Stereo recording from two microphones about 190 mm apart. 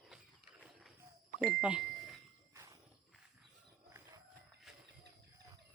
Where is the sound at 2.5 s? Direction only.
15° right (ahead or behind).